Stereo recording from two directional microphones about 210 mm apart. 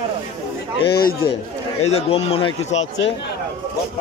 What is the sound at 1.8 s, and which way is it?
Speech, 30° left (ahead or behind).